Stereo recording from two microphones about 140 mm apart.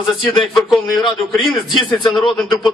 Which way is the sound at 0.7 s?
Centre (ahead or behind).